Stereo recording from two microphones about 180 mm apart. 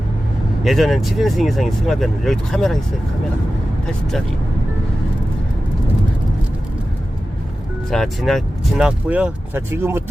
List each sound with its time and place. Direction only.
0.6 s speech: centre (ahead or behind)
7.9 s speech: centre (ahead or behind)